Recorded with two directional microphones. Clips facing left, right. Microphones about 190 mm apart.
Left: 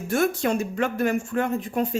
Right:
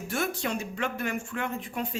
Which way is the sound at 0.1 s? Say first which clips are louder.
Left 8 dB; 45° left (ahead or behind).